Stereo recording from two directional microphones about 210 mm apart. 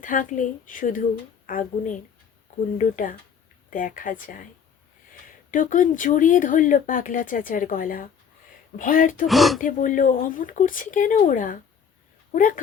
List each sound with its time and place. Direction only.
0.0 s speech: 40° left (ahead or behind)
5.5 s speech: 40° left (ahead or behind)
9.2 s speech: centre (ahead or behind)
9.6 s speech: 40° left (ahead or behind)